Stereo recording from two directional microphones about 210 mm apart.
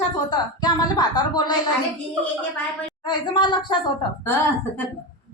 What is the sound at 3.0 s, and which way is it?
A woman's voice, 20° left (ahead or behind).